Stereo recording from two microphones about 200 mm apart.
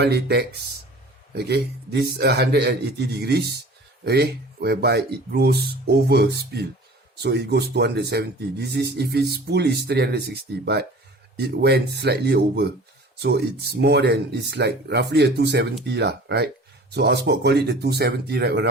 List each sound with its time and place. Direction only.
0.0 s a man's voice: 55° right (ahead or behind)